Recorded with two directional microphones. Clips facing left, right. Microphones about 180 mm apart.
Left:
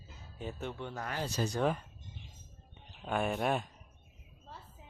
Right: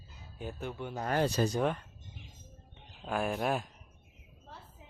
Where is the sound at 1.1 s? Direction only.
60° right (ahead or behind).